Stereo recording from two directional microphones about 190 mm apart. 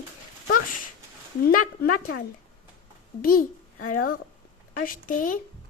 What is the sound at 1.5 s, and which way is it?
Speech, 50° left (ahead or behind).